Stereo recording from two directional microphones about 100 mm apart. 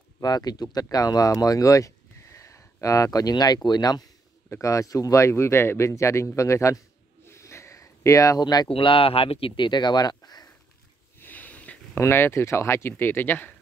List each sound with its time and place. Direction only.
0.2 s speech: 40° left (ahead or behind)
4.5 s speech: 30° left (ahead or behind)
7.2 s a sound: 30° left (ahead or behind)
8.6 s speech: 60° left (ahead or behind); by 10.5 s 40° left (ahead or behind)
11.1 s a sound: 15° left (ahead or behind)
12.0 s speech: 25° left (ahead or behind)